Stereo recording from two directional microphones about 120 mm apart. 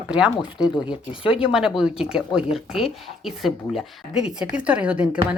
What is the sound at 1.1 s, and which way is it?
Speech, 45° left (ahead or behind).